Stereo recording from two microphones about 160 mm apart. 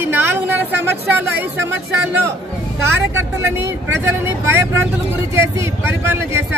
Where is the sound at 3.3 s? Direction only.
15° right (ahead or behind).